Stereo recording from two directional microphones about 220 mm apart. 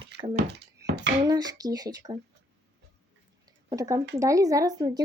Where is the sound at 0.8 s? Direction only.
50° right (ahead or behind).